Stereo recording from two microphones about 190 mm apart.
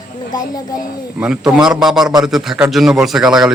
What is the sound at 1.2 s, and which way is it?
A man's voice, 5° right (ahead or behind).